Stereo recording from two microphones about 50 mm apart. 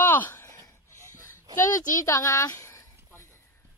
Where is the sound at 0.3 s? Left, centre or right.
Left.